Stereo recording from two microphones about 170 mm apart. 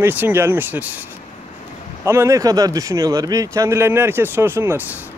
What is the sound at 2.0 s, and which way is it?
Speech, 15° right (ahead or behind).